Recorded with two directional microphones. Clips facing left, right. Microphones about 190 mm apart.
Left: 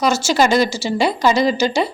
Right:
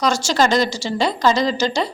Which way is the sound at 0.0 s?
5° left (ahead or behind).